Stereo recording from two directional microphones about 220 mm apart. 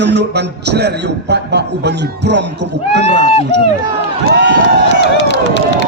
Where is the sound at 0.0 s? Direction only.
50° right (ahead or behind).